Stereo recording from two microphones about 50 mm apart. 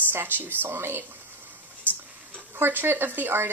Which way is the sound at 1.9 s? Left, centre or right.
Right.